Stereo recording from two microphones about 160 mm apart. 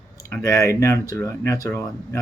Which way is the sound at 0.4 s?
20° left (ahead or behind).